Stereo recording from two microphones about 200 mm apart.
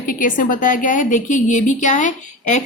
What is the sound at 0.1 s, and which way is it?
A woman's voice, 40° left (ahead or behind).